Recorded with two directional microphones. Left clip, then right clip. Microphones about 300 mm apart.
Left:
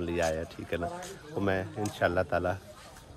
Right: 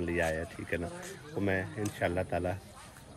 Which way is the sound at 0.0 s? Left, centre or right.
Centre.